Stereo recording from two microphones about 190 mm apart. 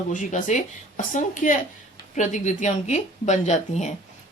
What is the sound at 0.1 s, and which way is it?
Speech, 45° left (ahead or behind).